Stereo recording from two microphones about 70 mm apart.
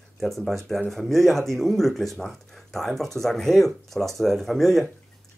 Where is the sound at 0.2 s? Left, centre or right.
Centre.